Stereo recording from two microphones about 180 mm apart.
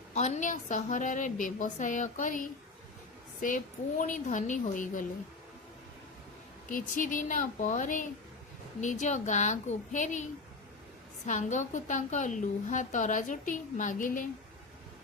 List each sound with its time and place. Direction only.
0.1 s a woman's voice: 40° left (ahead or behind)
6.7 s a woman's voice: 45° left (ahead or behind)
11.3 s a woman's voice: 45° left (ahead or behind)